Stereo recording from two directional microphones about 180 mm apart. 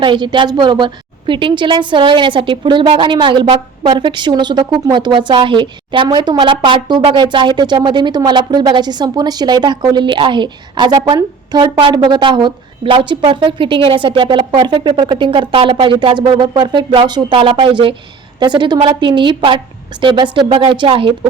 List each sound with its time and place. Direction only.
0.0 s a woman's voice: 25° right (ahead or behind)